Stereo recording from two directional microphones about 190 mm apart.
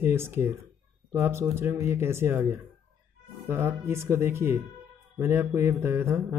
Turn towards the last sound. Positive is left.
turn(degrees=-15)  # may be behind; listen again after turning